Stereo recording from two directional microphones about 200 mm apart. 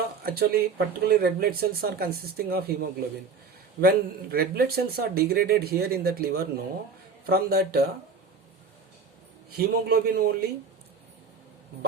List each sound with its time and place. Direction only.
0.2 s speech: 50° right (ahead or behind)
3.8 s speech: 50° right (ahead or behind)
9.6 s speech: 50° right (ahead or behind)